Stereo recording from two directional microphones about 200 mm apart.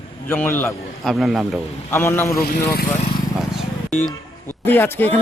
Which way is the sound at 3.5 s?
Centre (ahead or behind).